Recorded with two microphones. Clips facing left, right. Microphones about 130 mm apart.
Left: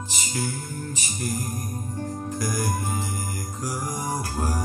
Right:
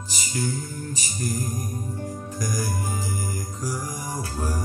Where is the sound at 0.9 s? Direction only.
40° right (ahead or behind).